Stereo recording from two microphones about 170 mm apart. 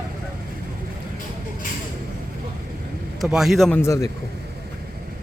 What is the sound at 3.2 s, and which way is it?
Speech, centre (ahead or behind).